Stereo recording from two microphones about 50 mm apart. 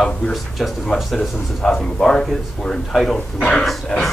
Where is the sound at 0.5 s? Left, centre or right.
Centre.